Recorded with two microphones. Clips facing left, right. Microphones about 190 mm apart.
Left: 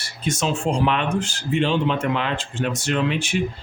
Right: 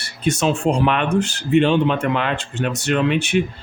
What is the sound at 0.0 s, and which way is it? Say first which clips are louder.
Speech: right 5 dB; 60° right (ahead or behind).